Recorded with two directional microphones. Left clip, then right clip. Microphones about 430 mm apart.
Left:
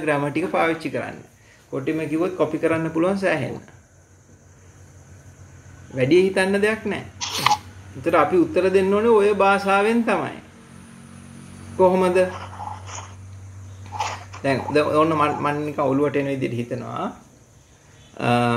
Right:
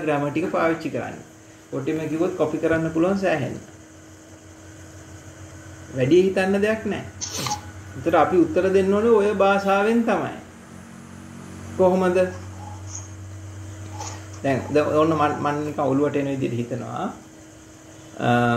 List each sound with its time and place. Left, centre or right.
0.0 s speech: centre
5.9 s speech: centre
7.2 s a sound: centre
8.0 s speech: centre
11.8 s speech: centre
14.4 s speech: centre
18.1 s speech: centre